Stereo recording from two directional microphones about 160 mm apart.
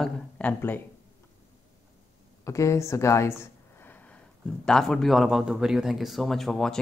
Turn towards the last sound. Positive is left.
turn(degrees=0)  # may be behind; listen again after turning